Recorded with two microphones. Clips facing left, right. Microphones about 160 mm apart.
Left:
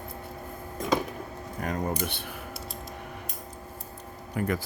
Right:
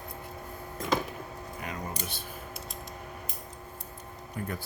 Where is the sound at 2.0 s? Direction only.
65° left (ahead or behind).